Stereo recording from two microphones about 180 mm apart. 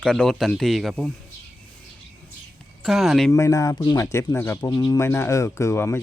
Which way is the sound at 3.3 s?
15° left (ahead or behind).